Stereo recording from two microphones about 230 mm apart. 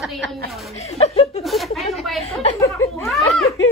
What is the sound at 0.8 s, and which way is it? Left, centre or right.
Chuckle, left.